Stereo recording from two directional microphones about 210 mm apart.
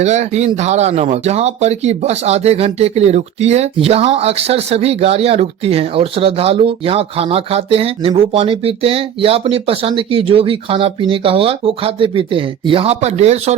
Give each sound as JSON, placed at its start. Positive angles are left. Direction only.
{"t": 0.0, "sound": "speech", "side_deg": -35}